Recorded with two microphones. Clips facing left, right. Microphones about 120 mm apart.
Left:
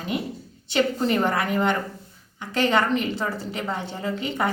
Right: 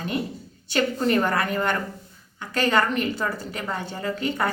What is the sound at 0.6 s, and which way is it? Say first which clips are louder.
A woman's voice: even; 20° left (ahead or behind).